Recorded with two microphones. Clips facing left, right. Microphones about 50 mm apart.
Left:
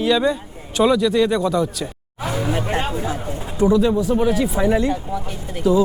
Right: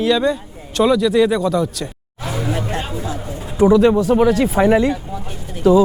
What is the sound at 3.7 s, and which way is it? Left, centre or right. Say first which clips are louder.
Speech: right 4 dB; right.